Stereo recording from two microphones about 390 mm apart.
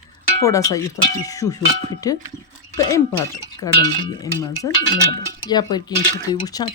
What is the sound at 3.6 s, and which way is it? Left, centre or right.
Speech, left.